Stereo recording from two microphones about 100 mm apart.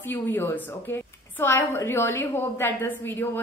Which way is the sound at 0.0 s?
20° left (ahead or behind).